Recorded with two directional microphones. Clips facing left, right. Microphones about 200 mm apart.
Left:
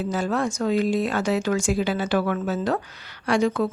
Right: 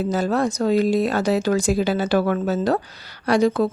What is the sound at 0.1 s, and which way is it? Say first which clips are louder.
Speech: right 3 dB; 40° right (ahead or behind).